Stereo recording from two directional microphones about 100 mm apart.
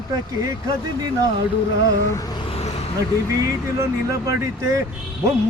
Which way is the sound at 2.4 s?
80° left.